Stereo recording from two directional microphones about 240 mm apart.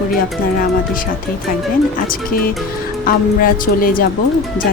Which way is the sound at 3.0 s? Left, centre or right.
Left.